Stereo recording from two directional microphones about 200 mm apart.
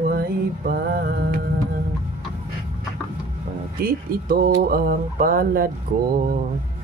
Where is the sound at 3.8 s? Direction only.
45° right (ahead or behind).